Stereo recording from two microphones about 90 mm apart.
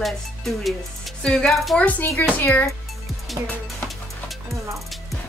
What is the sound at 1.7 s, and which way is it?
Speech, 15° left (ahead or behind).